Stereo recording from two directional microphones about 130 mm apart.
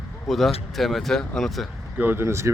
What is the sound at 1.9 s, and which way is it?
Speech, 15° right (ahead or behind).